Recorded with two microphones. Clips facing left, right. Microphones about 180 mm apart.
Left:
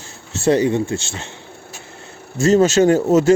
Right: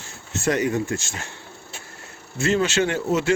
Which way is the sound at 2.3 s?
40° left (ahead or behind).